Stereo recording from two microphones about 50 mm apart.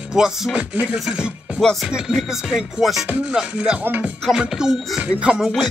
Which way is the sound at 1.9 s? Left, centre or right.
Centre.